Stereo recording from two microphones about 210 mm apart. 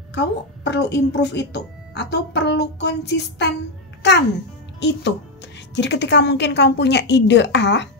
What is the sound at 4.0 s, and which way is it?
Music, 55° left (ahead or behind).